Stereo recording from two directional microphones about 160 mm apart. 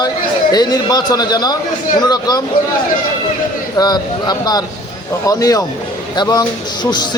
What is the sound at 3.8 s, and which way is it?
A man's voice, 25° left (ahead or behind).